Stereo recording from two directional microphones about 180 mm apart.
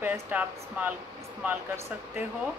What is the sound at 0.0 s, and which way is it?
Speech, 10° right (ahead or behind).